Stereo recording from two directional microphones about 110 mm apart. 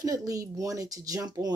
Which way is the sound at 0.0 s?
35° right (ahead or behind).